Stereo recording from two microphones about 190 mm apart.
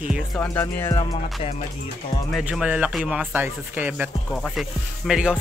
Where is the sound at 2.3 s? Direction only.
5° right (ahead or behind).